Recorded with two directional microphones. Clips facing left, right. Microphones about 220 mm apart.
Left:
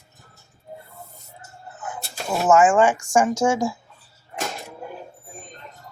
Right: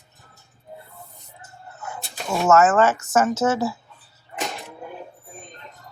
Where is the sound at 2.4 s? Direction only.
15° left (ahead or behind).